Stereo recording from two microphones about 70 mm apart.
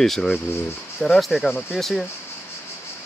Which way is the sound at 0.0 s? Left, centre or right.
Centre.